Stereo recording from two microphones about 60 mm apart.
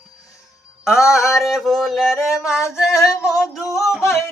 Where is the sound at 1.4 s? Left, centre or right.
Centre.